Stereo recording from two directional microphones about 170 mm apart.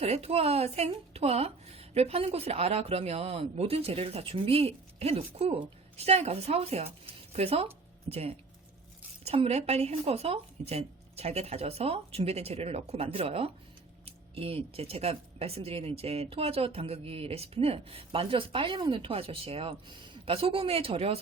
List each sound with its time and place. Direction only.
0.0 s speech: 35° right (ahead or behind)